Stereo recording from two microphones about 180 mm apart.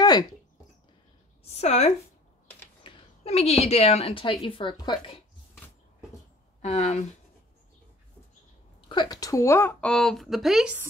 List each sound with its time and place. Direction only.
0.0 s a sound: 20° left (ahead or behind)
1.4 s a woman's voice: 35° left (ahead or behind)
6.6 s speech: 35° left (ahead or behind)
8.8 s speech: 25° left (ahead or behind); by 10.9 s 5° right (ahead or behind)